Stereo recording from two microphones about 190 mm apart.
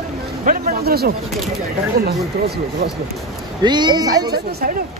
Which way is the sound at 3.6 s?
25° right (ahead or behind).